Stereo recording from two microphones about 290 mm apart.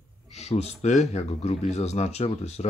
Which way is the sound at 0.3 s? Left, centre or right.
Left.